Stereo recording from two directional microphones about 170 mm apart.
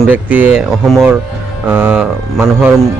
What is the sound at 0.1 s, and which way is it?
Speech, 10° right (ahead or behind).